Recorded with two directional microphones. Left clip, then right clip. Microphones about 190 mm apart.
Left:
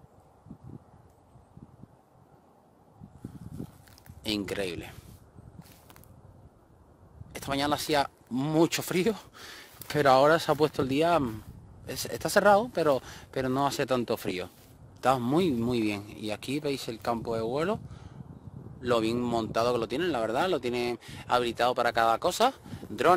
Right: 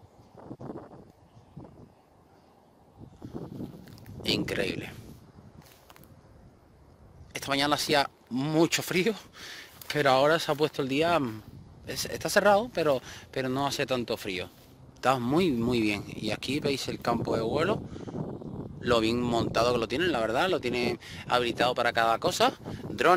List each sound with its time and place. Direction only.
3.8 s a sound: 15° left (ahead or behind)
7.3 s speech: 10° left (ahead or behind); by 14.5 s 35° left (ahead or behind)
15.0 s speech: 20° left (ahead or behind)